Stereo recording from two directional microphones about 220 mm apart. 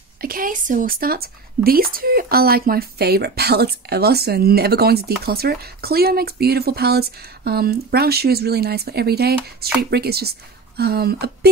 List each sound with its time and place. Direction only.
0.2 s a woman's voice: 40° right (ahead or behind)